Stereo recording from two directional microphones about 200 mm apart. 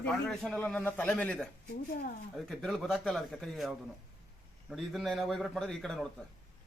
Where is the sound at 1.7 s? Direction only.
50° left (ahead or behind).